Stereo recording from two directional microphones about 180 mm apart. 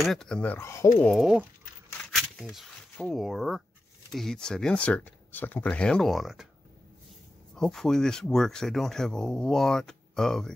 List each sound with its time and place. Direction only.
0.0 s speech: centre (ahead or behind)
7.5 s speech: centre (ahead or behind)